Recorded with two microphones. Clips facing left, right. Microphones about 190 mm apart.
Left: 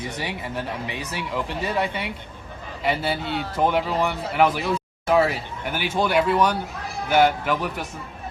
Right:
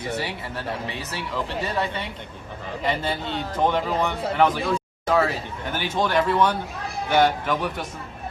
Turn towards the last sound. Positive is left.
turn(degrees=10)  # may be behind; listen again after turning